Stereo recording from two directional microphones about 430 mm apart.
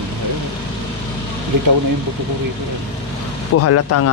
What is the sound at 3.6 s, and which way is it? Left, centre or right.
Speech, left.